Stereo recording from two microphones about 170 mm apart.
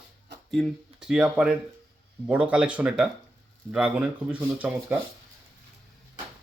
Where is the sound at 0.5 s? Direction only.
Centre (ahead or behind).